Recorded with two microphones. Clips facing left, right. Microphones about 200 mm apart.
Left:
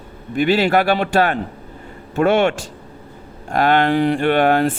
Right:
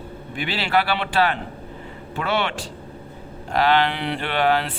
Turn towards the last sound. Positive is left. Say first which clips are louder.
# left 6 dB
turn(degrees=50)  # may be behind; listen again after turning